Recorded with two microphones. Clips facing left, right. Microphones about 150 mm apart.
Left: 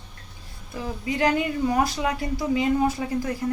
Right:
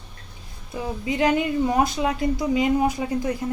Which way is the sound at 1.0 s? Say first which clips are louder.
Right 2 dB; 20° right (ahead or behind).